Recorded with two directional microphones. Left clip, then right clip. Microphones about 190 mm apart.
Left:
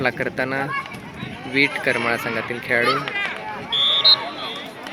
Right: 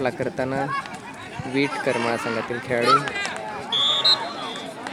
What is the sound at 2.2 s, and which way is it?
Speech, 35° right (ahead or behind).